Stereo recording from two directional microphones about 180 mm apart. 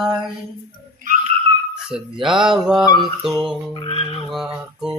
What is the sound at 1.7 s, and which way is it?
Speech, 5° right (ahead or behind).